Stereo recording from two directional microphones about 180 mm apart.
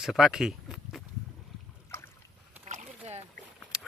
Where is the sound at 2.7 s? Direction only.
45° right (ahead or behind).